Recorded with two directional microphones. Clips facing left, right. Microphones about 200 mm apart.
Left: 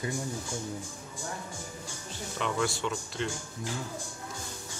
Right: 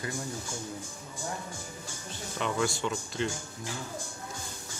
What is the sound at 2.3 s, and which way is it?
Speech, centre (ahead or behind).